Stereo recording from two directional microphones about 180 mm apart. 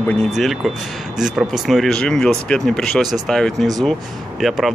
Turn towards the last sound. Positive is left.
turn(degrees=0)  # may be behind; listen again after turning